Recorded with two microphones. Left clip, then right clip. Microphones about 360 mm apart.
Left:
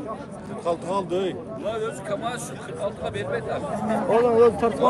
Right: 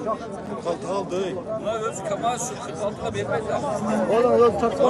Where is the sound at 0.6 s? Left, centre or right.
Left.